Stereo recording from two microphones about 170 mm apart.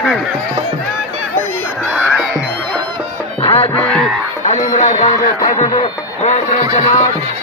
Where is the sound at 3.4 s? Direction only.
35° left (ahead or behind).